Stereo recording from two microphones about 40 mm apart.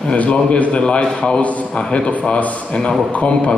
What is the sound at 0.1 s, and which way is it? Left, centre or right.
A man's voice, left.